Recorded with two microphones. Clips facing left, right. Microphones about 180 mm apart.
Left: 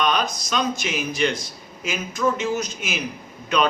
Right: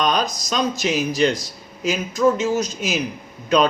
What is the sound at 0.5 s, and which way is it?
A man's voice, 35° right (ahead or behind).